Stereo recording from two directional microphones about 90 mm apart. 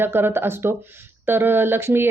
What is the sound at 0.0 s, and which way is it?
Speech, 25° right (ahead or behind).